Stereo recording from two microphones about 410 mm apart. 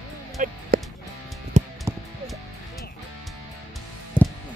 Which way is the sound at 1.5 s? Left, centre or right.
Centre.